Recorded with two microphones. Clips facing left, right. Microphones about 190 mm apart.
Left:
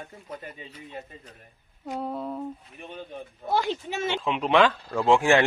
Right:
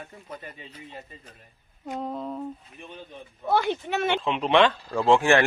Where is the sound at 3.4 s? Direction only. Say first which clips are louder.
Right 2 dB; 60° right (ahead or behind).